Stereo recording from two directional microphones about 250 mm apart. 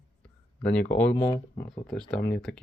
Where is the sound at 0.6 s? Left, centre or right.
Centre.